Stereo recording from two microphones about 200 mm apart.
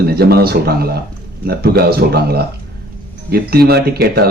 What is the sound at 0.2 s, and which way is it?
Speech, 50° right (ahead or behind).